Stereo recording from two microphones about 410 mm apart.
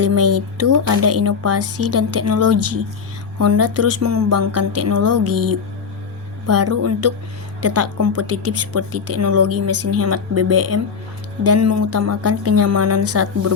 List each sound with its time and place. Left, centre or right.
0.0 s a woman's voice: right